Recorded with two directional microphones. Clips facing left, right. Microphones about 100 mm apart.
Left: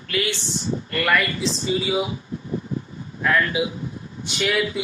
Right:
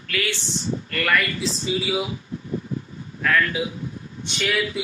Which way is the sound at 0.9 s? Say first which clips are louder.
Left 2 dB; 5° left (ahead or behind).